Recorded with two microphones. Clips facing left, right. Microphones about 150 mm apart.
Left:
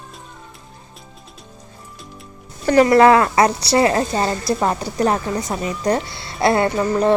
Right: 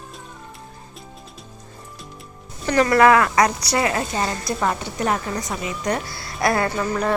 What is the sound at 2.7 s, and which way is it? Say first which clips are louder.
A woman's voice: left 4 dB; 25° left (ahead or behind).